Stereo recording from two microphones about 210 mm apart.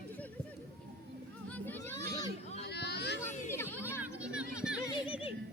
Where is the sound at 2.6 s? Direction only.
50° left (ahead or behind).